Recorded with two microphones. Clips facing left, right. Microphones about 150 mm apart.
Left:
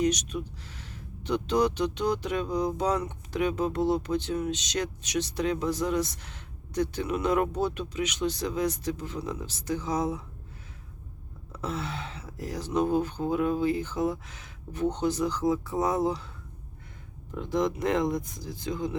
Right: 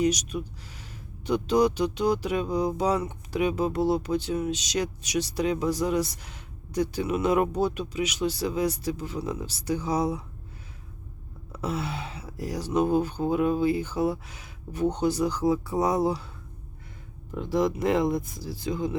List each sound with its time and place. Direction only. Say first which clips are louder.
0.0 s speech: right 2 dB; 10° right (ahead or behind)
11.5 s speech: right 3 dB; 10° right (ahead or behind)
17.3 s speech: right 2 dB; 5° right (ahead or behind)